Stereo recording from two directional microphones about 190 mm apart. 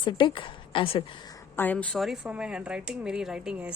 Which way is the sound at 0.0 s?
25° left (ahead or behind).